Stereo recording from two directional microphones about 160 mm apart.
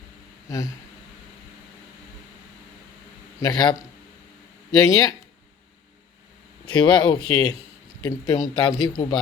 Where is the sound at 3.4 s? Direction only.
25° left (ahead or behind).